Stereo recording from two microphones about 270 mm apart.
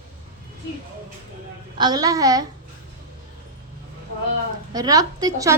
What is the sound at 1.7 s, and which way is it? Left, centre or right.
Speech, centre.